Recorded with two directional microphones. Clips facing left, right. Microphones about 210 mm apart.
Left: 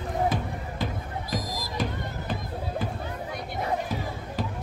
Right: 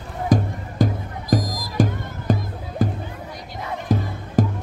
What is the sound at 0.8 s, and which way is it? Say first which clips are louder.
Music: right 11 dB; 45° right (ahead or behind).